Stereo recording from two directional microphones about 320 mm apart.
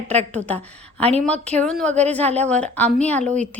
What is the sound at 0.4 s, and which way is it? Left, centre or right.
Speech, centre.